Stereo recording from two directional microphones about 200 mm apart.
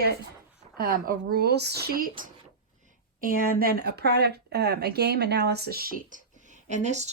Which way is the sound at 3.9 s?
55° right (ahead or behind).